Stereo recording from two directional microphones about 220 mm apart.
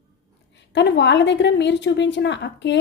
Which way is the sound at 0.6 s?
55° left (ahead or behind).